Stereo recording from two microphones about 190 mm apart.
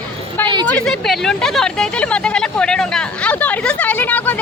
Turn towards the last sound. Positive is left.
turn(degrees=10)  # may be behind; listen again after turning